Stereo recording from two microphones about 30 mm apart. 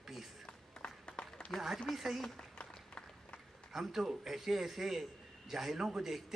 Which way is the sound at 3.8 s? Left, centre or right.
Centre.